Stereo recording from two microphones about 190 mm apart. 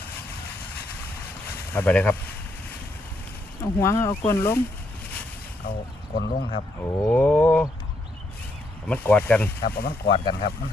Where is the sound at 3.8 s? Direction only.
15° left (ahead or behind).